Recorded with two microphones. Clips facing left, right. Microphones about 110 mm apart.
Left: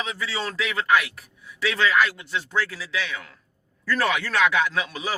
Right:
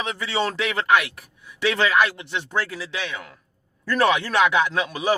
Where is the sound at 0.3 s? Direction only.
65° right (ahead or behind).